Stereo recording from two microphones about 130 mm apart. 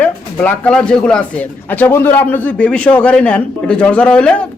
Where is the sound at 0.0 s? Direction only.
10° left (ahead or behind).